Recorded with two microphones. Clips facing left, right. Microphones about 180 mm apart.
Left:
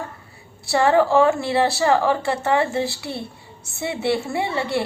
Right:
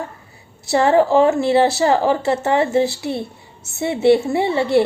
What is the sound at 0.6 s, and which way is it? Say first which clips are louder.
Speech: right 3 dB; 20° right (ahead or behind).